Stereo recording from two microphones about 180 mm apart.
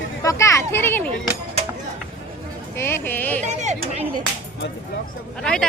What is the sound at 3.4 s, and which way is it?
Chatter, 40° right (ahead or behind).